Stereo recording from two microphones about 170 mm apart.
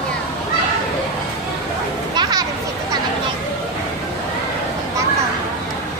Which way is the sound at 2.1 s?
25° right (ahead or behind).